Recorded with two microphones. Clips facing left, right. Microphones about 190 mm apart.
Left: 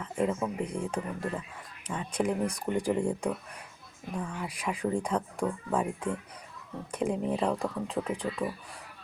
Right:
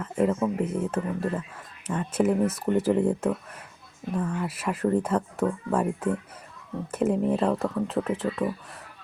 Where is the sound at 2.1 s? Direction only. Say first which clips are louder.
Right 6 dB; 5° right (ahead or behind).